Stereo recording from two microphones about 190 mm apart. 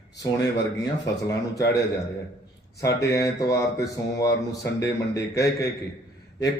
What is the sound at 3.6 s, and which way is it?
A man's voice, 15° left (ahead or behind).